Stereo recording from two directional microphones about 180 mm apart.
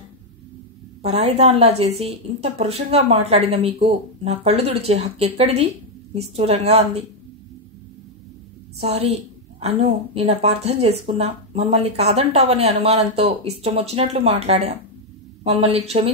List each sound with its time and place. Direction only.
1.0 s a woman's voice: 35° right (ahead or behind)
8.7 s a woman's voice: 35° right (ahead or behind)